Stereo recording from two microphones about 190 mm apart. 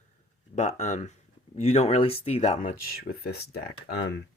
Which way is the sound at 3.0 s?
60° left (ahead or behind).